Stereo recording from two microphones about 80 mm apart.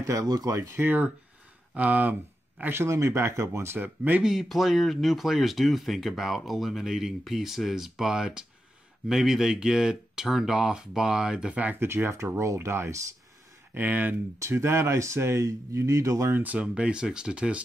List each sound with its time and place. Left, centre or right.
0.0 s speech: right
0.7 s speech: right
2.6 s speech: right
4.2 s speech: centre
11.8 s speech: right
14.4 s speech: right
16.3 s speech: centre